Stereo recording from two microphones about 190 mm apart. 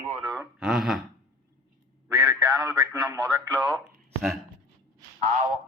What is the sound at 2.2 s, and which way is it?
Speech, 20° right (ahead or behind).